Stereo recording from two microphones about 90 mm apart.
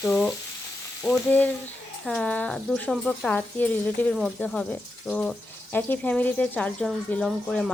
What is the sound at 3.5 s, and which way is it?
Speech, 20° left (ahead or behind).